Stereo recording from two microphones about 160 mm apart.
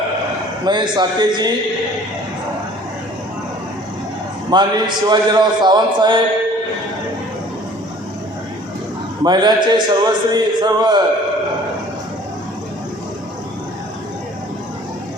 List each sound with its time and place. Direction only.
0.6 s a man's voice: 30° right (ahead or behind)
4.5 s a man's voice: 25° right (ahead or behind)
9.2 s a man's voice: 25° right (ahead or behind)